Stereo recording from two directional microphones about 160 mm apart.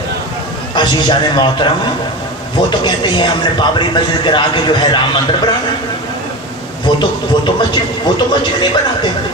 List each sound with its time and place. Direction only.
0.8 s speech: 30° left (ahead or behind)
6.8 s speech: 30° left (ahead or behind)